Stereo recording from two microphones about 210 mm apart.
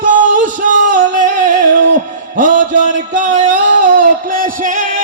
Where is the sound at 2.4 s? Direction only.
40° right (ahead or behind).